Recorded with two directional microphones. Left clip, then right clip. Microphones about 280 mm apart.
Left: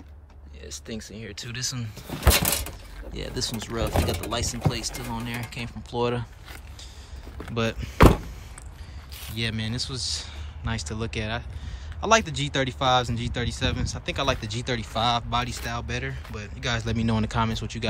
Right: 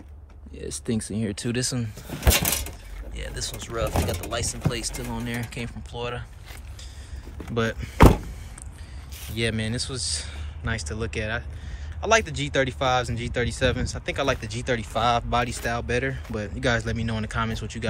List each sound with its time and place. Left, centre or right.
0.7 s speech: centre
5.9 s speech: centre
7.5 s speech: centre